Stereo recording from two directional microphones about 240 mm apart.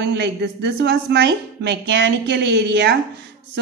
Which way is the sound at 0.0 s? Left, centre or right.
Right.